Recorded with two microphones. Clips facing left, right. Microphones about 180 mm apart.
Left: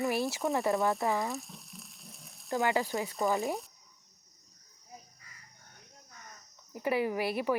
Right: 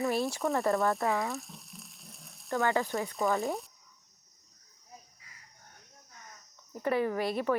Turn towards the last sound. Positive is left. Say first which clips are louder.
# right 1 dB
turn(degrees=5)  # may be behind; listen again after turning